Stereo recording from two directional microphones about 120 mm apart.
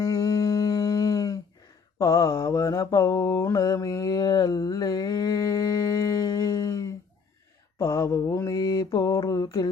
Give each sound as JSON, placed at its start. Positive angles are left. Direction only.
{"t": 0.0, "sound": "humming", "side_deg": 30}
{"t": 2.0, "sound": "mantra", "side_deg": 30}